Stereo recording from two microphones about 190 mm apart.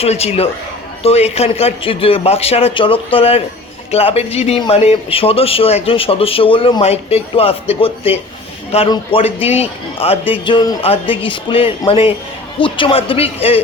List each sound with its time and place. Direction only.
0.0 s a man's voice: 30° left (ahead or behind)